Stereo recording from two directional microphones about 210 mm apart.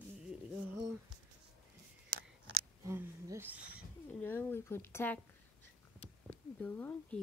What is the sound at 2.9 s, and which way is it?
Speech, 15° right (ahead or behind).